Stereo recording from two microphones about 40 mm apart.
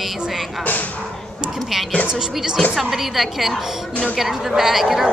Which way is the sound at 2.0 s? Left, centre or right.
Right.